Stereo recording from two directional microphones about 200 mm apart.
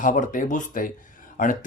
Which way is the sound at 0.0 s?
40° left (ahead or behind).